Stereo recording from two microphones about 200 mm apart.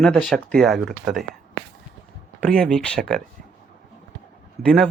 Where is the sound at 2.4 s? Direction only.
5° left (ahead or behind).